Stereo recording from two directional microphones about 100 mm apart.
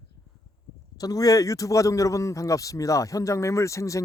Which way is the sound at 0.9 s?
40° left (ahead or behind).